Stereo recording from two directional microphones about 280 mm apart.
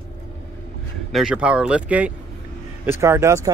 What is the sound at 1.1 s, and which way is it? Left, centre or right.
Speech, centre.